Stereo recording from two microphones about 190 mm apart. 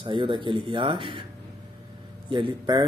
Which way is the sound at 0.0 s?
25° right (ahead or behind).